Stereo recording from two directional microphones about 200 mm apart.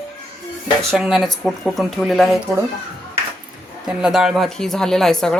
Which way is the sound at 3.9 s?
5° right (ahead or behind).